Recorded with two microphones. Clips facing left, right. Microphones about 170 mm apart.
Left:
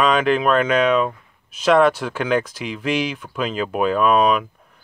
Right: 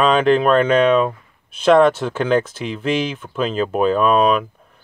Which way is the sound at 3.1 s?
25° right (ahead or behind).